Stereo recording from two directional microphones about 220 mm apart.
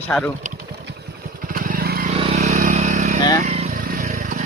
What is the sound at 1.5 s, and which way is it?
Vehicle, 40° right (ahead or behind).